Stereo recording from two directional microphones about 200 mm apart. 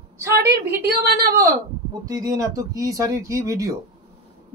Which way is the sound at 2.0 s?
20° right (ahead or behind).